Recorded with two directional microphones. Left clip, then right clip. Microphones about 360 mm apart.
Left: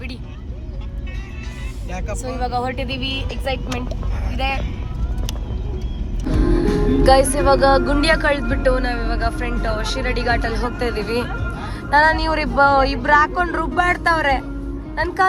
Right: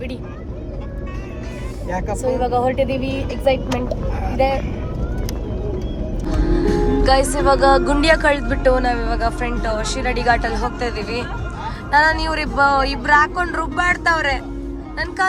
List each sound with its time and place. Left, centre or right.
2.4 s speech: centre
6.4 s speech: centre